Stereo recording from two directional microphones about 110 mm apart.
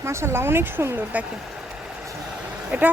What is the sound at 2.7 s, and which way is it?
Speech, 15° right (ahead or behind).